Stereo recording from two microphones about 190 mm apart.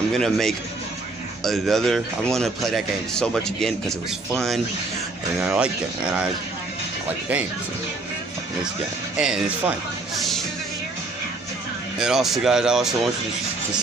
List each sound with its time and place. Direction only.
0.1 s a man's voice: centre (ahead or behind)
9.1 s a man's voice: 5° right (ahead or behind)
12.0 s a man's voice: centre (ahead or behind)